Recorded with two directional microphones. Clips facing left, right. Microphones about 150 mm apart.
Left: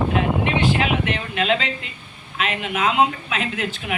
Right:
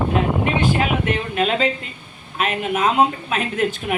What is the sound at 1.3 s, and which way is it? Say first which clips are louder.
Speech: right 2 dB; 45° right (ahead or behind).